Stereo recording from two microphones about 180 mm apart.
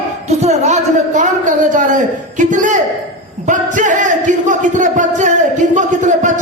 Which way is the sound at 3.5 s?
45° right (ahead or behind).